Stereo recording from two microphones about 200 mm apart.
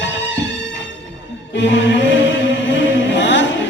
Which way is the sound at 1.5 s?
65° left (ahead or behind).